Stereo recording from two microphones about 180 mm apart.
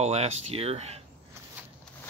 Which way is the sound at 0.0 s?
35° right (ahead or behind).